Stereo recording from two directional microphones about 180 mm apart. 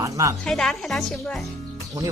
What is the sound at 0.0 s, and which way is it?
Music, 15° right (ahead or behind).